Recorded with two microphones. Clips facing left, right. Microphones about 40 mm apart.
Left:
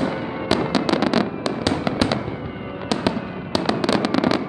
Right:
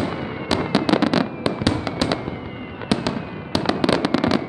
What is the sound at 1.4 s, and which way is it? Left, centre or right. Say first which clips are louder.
Fireworks: right 1 dB; centre.